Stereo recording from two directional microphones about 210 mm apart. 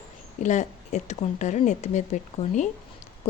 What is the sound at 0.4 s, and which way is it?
Speech, 35° left (ahead or behind).